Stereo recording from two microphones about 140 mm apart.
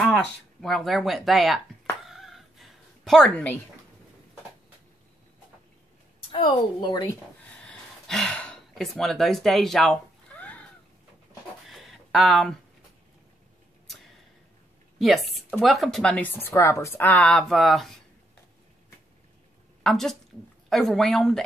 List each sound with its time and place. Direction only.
0.0 s speech: 5° left (ahead or behind)
2.0 s chicken: centre (ahead or behind)
6.3 s a woman's voice: 35° left (ahead or behind)
7.4 s gasp: 5° left (ahead or behind)
11.7 s a sound: centre (ahead or behind)
15.0 s speech: centre (ahead or behind)
19.8 s a woman's voice: centre (ahead or behind)